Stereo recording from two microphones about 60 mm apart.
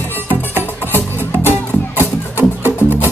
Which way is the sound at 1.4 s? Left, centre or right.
Left.